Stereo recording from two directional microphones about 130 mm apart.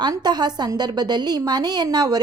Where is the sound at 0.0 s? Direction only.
35° right (ahead or behind).